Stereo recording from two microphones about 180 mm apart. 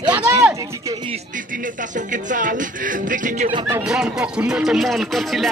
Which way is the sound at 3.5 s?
15° right (ahead or behind).